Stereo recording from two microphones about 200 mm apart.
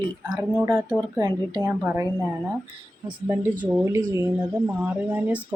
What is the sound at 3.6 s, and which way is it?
Speech, 15° right (ahead or behind).